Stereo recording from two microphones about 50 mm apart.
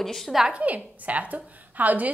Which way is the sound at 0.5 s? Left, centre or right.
Right.